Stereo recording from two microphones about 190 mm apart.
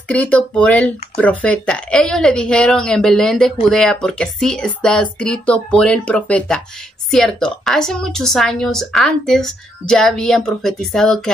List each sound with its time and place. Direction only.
0.1 s a woman's voice: 10° left (ahead or behind)